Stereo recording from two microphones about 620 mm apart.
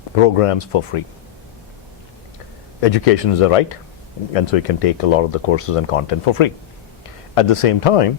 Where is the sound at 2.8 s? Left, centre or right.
Left.